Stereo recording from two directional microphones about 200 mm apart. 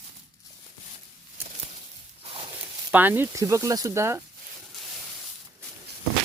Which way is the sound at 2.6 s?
10° right (ahead or behind).